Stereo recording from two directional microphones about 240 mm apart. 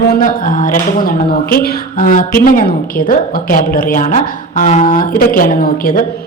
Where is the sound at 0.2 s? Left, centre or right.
Left.